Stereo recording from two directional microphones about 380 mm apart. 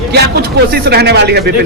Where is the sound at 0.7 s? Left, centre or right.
Right.